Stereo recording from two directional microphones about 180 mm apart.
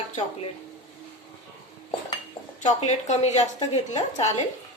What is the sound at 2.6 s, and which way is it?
A woman's voice, 40° left (ahead or behind).